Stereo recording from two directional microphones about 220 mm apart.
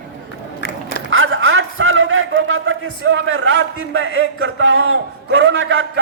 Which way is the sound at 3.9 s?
55° right (ahead or behind).